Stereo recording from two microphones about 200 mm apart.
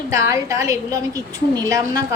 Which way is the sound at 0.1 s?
15° right (ahead or behind).